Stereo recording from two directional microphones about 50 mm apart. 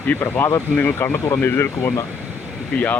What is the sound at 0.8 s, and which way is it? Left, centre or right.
Speech, left.